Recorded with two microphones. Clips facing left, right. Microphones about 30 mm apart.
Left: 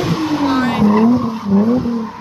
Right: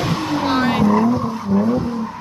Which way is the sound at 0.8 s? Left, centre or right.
Centre.